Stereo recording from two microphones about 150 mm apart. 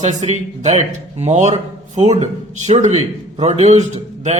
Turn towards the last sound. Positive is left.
turn(degrees=-45)  # may be behind; listen again after turning